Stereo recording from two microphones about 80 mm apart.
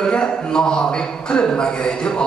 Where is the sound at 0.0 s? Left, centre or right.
Centre.